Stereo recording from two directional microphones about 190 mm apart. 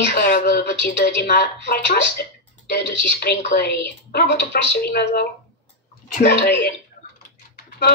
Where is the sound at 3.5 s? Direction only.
60° left (ahead or behind).